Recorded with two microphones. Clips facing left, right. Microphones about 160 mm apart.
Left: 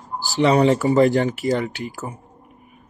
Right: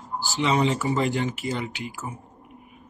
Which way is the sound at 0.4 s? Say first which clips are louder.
Left 7 dB; 45° left (ahead or behind).